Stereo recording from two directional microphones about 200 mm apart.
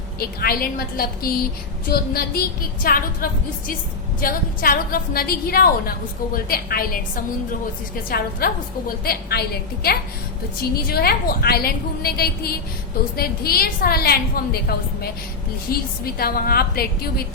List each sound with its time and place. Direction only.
0.2 s a woman's voice: 50° left (ahead or behind)
8.1 s a woman's voice: 50° left (ahead or behind)